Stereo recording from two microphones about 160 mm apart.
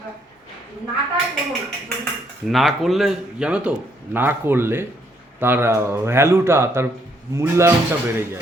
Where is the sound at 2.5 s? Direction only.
Centre (ahead or behind); by 8.4 s 15° right (ahead or behind).